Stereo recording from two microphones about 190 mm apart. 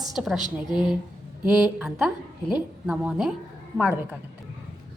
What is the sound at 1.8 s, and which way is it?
A woman's voice, centre (ahead or behind).